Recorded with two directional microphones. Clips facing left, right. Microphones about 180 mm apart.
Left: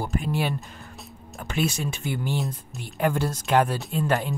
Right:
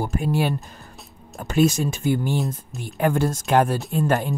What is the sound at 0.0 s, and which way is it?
Speech, 45° right (ahead or behind).